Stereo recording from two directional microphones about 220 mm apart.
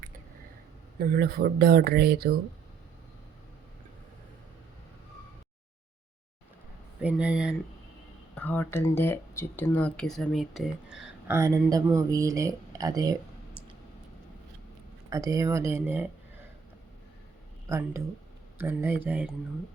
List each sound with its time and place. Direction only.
0.9 s speech: 45° right (ahead or behind)
7.0 s speech: 5° right (ahead or behind)
8.4 s speech: 10° left (ahead or behind); by 13.6 s 15° right (ahead or behind)
15.1 s speech: 15° right (ahead or behind)
17.7 s speech: 10° right (ahead or behind)